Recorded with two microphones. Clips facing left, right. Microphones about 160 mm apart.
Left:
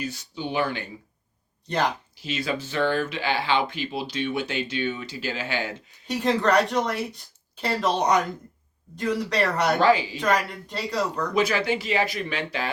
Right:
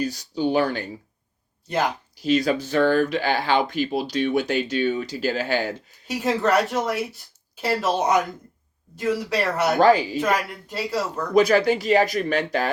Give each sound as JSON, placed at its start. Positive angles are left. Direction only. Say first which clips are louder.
{"t": 0.0, "sound": "speech", "louder": "right 8 dB", "side_deg": -40}
{"t": 1.6, "sound": "speech", "louder": "right 1 dB", "side_deg": -5}
{"t": 2.2, "sound": "speech", "louder": "right 8 dB", "side_deg": -40}
{"t": 6.1, "sound": "speech", "louder": "right 1 dB", "side_deg": -5}
{"t": 9.7, "sound": "speech", "louder": "right 5 dB", "side_deg": -45}
{"t": 10.2, "sound": "speech", "louder": "right 1 dB", "side_deg": -5}
{"t": 11.3, "sound": "speech", "louder": "right 7 dB", "side_deg": -40}